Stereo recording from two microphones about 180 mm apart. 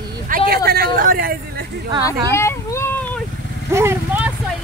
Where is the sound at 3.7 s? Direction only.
15° right (ahead or behind).